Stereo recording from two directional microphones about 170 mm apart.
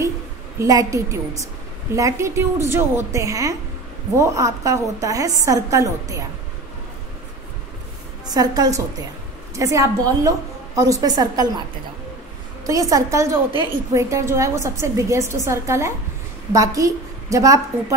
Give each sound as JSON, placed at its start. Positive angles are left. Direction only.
{"t": 0.6, "sound": "a woman's voice", "side_deg": -20}
{"t": 8.3, "sound": "a woman's voice", "side_deg": -20}
{"t": 12.6, "sound": "a woman's voice", "side_deg": -20}